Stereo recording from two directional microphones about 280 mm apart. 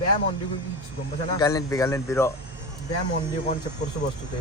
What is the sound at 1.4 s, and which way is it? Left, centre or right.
Speech, centre.